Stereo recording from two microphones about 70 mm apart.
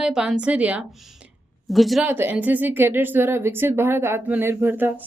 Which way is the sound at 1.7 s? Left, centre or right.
Centre.